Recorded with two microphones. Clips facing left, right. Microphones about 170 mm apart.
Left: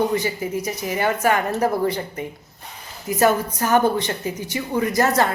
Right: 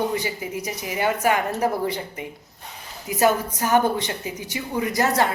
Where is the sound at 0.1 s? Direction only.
15° right (ahead or behind).